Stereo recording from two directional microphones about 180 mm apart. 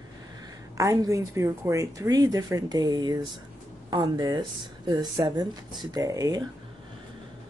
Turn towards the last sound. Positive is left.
turn(degrees=-20)  # may be behind; listen again after turning